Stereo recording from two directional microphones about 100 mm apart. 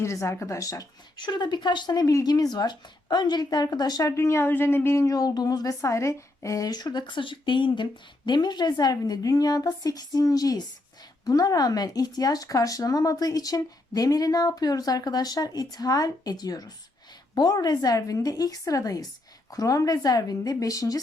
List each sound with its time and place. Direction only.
0.0 s speech: 30° left (ahead or behind)